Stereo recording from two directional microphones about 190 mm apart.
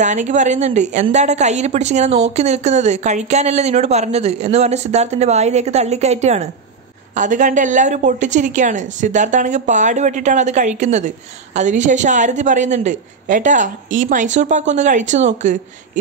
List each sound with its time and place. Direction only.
0.0 s a woman's voice: 40° right (ahead or behind)